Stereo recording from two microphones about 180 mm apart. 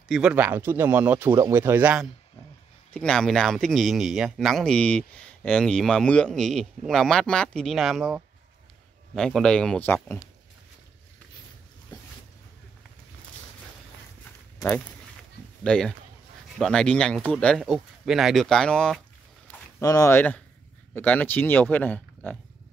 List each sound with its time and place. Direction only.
0.1 s speech: 5° right (ahead or behind)
2.9 s speech: 5° left (ahead or behind)
11.9 s a sound: 20° left (ahead or behind)
15.6 s speech: 5° left (ahead or behind)
19.8 s speech: 20° left (ahead or behind)